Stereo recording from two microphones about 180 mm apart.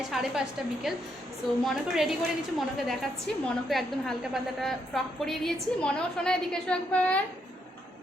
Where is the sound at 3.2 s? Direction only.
Centre (ahead or behind).